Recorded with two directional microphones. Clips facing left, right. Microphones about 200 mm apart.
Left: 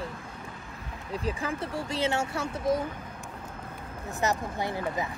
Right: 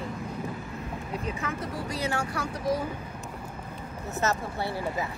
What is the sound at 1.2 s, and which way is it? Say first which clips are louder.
Speech: left 4 dB; 30° left (ahead or behind).